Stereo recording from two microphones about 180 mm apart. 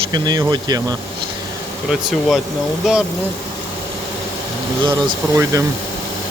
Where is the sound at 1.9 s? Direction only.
Centre (ahead or behind).